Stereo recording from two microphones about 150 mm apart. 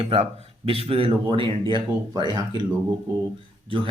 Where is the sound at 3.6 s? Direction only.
35° right (ahead or behind).